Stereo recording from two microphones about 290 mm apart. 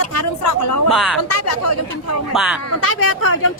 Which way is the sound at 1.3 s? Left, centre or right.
Left.